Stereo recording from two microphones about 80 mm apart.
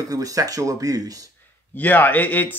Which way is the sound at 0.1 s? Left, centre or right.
Right.